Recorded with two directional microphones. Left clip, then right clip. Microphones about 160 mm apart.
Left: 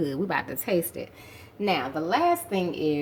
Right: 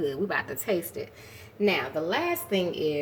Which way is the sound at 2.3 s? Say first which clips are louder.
Left 2 dB; 35° left (ahead or behind).